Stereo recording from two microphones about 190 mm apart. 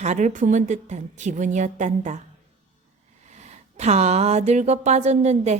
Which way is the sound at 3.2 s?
35° right (ahead or behind).